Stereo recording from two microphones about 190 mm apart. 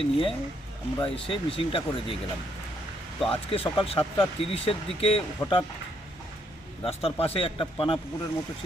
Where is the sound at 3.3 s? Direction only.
30° left (ahead or behind).